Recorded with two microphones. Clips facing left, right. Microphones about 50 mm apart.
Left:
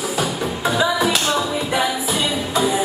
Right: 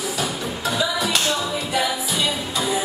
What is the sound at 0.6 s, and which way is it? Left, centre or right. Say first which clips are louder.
Music: left 5 dB; left.